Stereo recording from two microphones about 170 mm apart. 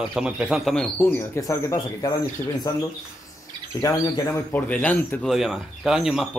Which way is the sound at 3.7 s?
20° left (ahead or behind).